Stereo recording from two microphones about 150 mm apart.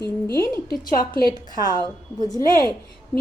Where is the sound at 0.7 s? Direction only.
75° left (ahead or behind).